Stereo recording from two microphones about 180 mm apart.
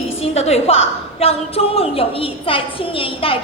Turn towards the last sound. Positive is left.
turn(degrees=30)  # may be behind; listen again after turning